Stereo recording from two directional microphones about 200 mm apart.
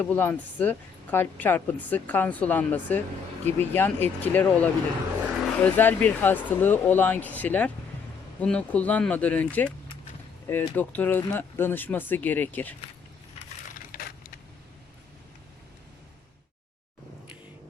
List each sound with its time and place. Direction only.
0.0 s a woman's voice: 10° left (ahead or behind)
13.9 s crushing: 45° left (ahead or behind)